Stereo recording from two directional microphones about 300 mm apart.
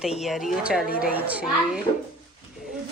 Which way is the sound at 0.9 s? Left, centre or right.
Left.